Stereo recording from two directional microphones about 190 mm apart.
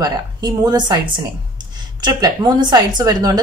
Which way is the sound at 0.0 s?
20° right (ahead or behind).